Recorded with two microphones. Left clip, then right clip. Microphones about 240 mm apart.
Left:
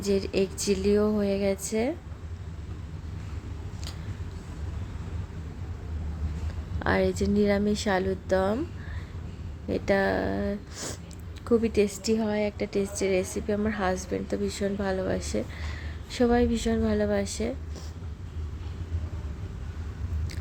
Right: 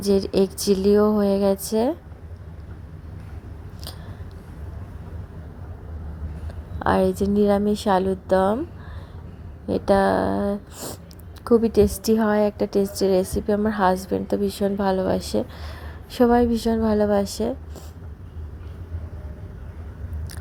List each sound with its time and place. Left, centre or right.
0.0 s a woman's voice: right
6.7 s a woman's voice: centre
9.6 s a woman's voice: centre